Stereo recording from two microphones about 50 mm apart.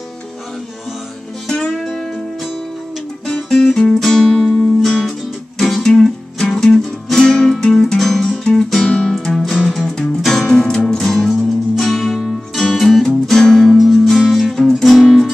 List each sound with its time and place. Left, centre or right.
1.5 s music: centre
3.4 s music: centre
10.5 s music: centre
13.0 s music: centre